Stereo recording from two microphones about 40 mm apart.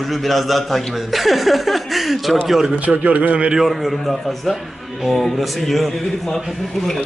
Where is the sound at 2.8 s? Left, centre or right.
Right.